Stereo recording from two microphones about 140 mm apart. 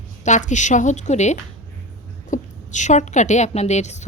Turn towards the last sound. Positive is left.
turn(degrees=55)  # may be behind; listen again after turning